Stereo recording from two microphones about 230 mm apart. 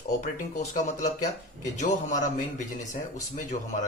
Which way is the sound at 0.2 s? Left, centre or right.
Left.